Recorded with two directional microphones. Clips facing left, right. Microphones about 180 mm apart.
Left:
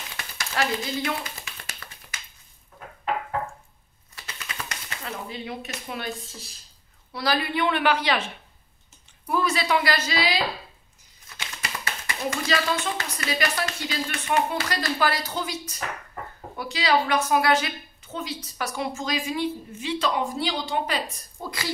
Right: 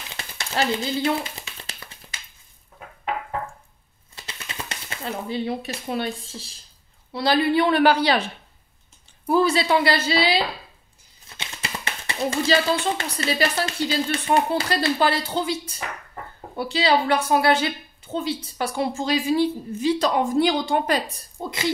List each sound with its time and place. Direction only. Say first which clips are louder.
0.2 s a sound: right 3 dB; 30° right (ahead or behind)
4.1 s typewriter: right 1 dB; 25° right (ahead or behind)
7.1 s speech: right 6 dB; 25° right (ahead or behind)
9.2 s a woman's voice: right 6 dB; 30° right (ahead or behind)
20.3 s a woman's voice: right 7 dB; 50° right (ahead or behind)
21.4 s speech: right 4 dB; 25° right (ahead or behind)